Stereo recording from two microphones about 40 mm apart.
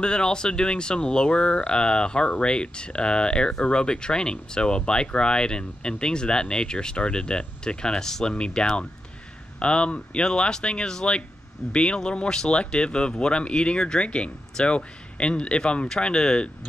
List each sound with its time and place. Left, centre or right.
0.0 s speech: left